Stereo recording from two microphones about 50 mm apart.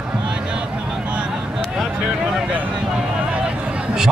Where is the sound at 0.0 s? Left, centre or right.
Centre.